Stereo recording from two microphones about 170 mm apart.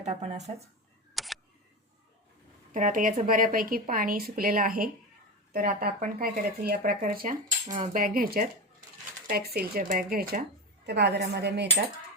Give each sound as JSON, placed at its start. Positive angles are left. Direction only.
{"t": 0.0, "sound": "speech", "side_deg": -40}
{"t": 1.1, "sound": "camera", "side_deg": 0}
{"t": 2.7, "sound": "speech", "side_deg": -50}
{"t": 10.8, "sound": "speech", "side_deg": -75}